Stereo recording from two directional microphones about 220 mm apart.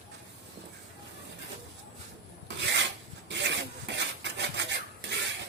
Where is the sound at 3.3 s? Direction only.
55° right (ahead or behind).